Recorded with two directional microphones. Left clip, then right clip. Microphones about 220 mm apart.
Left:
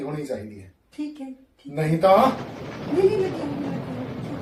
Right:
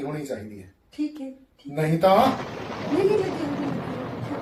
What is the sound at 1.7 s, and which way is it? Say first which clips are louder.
Speech: left 2 dB; centre (ahead or behind).